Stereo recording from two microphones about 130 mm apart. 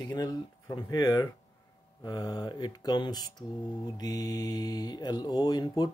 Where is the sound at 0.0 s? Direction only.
30° left (ahead or behind).